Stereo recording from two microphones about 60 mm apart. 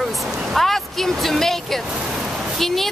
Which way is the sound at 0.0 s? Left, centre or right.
Centre.